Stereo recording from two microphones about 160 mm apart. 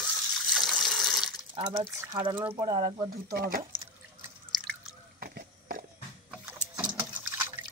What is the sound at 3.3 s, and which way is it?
Speech, 65° right (ahead or behind).